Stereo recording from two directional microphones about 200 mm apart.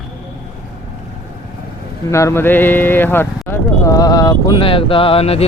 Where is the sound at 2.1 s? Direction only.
15° left (ahead or behind).